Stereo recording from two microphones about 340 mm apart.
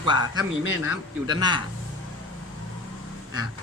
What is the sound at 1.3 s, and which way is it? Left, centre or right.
Speech, centre.